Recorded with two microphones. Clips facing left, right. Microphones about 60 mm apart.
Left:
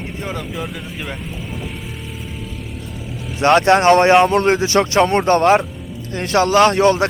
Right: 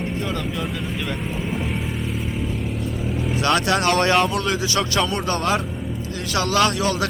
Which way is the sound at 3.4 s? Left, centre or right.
Left.